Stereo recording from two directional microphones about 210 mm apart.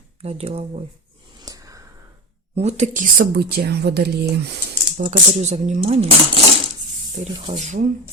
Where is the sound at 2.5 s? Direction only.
30° right (ahead or behind); by 5.1 s 50° right (ahead or behind).